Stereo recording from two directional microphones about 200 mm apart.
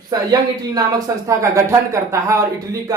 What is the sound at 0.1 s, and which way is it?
Speech, 20° right (ahead or behind).